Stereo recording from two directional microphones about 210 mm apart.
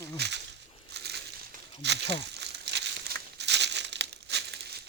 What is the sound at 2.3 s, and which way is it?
Crumpling, 55° right (ahead or behind).